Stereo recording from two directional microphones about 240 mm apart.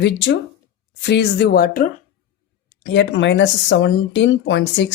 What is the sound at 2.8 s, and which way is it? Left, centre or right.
Speech, left.